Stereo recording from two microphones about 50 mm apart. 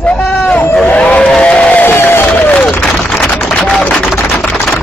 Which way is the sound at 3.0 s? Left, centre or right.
Centre.